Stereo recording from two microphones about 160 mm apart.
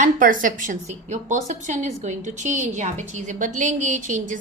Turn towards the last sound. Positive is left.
turn(degrees=-50)  # may be behind; listen again after turning